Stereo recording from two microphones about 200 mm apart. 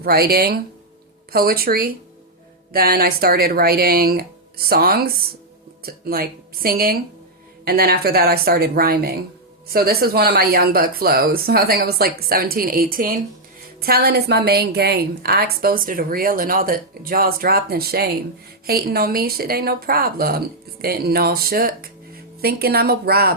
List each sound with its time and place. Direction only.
0.0 s a woman's voice: 50° right (ahead or behind)